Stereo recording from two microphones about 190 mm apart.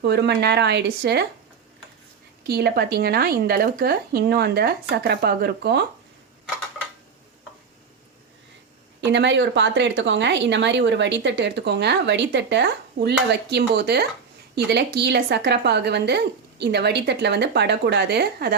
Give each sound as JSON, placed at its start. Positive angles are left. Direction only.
{"t": 0.0, "sound": "a woman's voice", "side_deg": -60}
{"t": 2.5, "sound": "a woman's voice", "side_deg": -55}
{"t": 9.0, "sound": "a woman's voice", "side_deg": -65}